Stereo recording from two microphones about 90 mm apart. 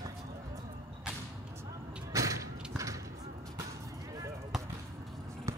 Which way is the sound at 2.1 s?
35° right (ahead or behind).